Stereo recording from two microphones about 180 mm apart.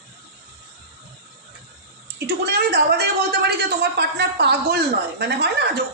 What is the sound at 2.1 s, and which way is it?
A woman's voice, 60° right (ahead or behind).